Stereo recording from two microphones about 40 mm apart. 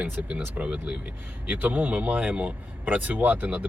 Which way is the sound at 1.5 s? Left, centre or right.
Right.